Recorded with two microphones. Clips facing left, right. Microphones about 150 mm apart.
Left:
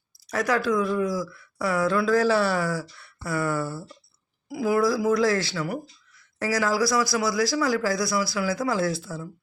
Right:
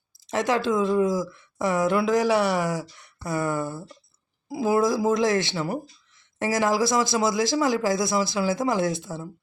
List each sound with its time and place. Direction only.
0.3 s speech: 20° right (ahead or behind)